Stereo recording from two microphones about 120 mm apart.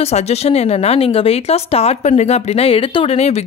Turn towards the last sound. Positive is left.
turn(degrees=60)  # may be behind; listen again after turning